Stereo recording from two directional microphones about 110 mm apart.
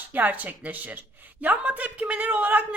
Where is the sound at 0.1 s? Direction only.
15° right (ahead or behind).